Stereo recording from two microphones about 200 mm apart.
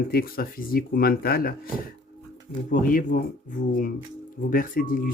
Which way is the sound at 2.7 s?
45° left (ahead or behind).